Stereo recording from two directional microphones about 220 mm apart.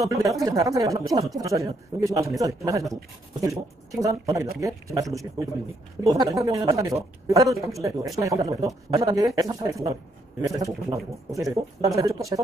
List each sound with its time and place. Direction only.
0.0 s speech: 15° right (ahead or behind)
6.0 s speech: 15° right (ahead or behind)
7.4 s speech: centre (ahead or behind)
8.2 s speech: 15° right (ahead or behind)